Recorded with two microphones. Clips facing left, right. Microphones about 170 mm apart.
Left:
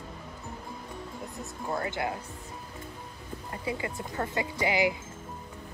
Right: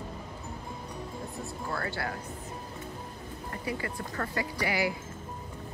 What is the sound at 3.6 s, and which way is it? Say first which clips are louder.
Speech: left 1 dB; 20° left (ahead or behind).